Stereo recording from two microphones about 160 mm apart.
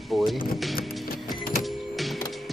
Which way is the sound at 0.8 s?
65° left (ahead or behind).